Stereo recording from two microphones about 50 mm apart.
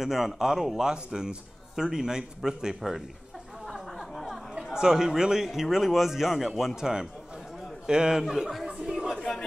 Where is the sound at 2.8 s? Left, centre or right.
Centre.